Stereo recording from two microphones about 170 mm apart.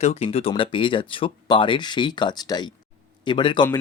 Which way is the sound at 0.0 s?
35° left (ahead or behind).